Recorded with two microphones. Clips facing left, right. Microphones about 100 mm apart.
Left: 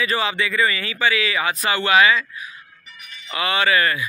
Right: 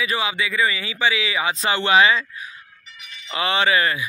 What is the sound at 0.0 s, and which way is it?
Speech, 5° right (ahead or behind).